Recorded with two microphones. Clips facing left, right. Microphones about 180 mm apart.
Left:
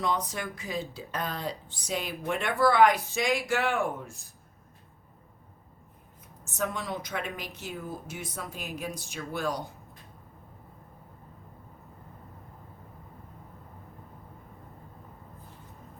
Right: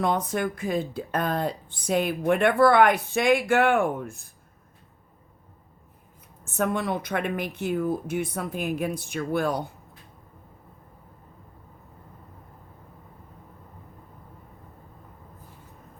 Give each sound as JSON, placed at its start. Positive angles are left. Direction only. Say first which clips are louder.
{"t": 0.0, "sound": "speech", "louder": "right 6 dB", "side_deg": -55}
{"t": 6.4, "sound": "speech", "louder": "right 7 dB", "side_deg": -55}